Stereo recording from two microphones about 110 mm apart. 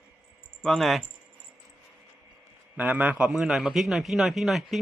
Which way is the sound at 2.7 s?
15° right (ahead or behind).